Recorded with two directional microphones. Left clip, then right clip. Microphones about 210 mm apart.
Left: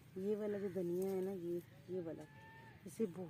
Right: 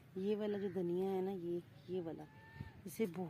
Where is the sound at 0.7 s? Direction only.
15° right (ahead or behind).